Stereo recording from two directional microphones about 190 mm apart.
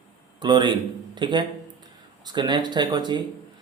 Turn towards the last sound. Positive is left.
turn(degrees=-25)  # may be behind; listen again after turning